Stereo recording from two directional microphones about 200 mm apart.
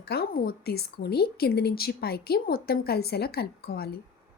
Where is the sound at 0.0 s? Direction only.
50° left (ahead or behind).